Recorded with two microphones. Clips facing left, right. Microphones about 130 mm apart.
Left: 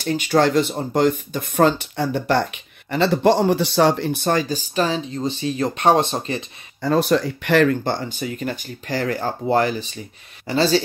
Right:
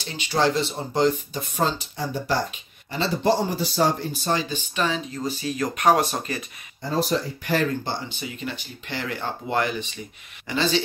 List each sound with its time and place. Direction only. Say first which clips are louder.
0.0 s speech: left 5 dB; 50° left (ahead or behind); by 6.4 s 25° left (ahead or behind)
6.8 s speech: left 6 dB; 70° left (ahead or behind); by 10.8 s 35° left (ahead or behind)